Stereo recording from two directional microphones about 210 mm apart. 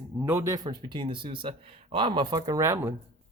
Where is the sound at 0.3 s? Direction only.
15° right (ahead or behind).